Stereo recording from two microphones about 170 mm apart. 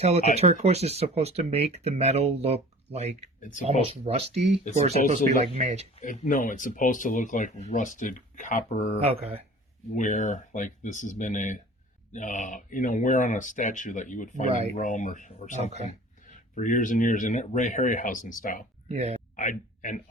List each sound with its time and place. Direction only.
0.3 s speech: 40° right (ahead or behind)
3.4 s speech: 50° left (ahead or behind)
3.8 s speech: 40° right (ahead or behind)
6.0 s speech: 50° left (ahead or behind)
15.7 s speech: 40° right (ahead or behind)
16.2 s speech: 50° left (ahead or behind)
18.9 s speech: 40° right (ahead or behind)
19.4 s a sound: 50° left (ahead or behind)